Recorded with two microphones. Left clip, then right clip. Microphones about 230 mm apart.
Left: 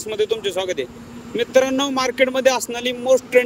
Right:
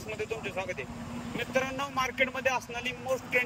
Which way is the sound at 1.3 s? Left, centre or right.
Left.